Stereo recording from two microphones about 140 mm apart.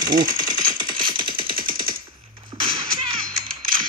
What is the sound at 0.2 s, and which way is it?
Speech, 80° right.